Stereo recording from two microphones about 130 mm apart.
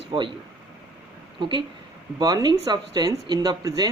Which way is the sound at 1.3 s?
35° right (ahead or behind).